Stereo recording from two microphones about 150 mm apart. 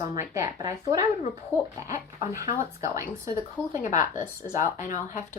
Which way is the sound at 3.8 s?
60° left (ahead or behind).